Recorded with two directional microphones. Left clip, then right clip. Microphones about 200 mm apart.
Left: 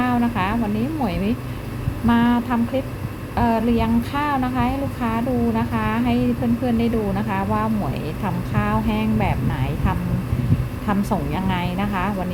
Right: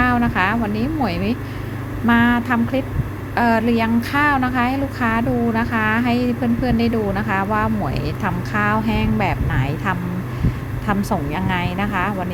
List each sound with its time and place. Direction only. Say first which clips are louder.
0.0 s a woman's voice: right 4 dB; 10° right (ahead or behind)